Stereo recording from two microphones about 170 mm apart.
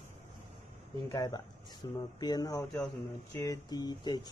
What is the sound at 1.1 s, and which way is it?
Speech, 20° left (ahead or behind).